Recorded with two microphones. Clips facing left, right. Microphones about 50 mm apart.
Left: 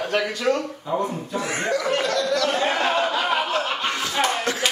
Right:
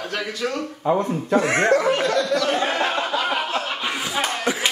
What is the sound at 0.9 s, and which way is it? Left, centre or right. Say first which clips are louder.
Speech: right 7 dB; right.